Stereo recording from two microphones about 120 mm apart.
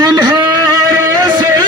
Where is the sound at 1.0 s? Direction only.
30° right (ahead or behind).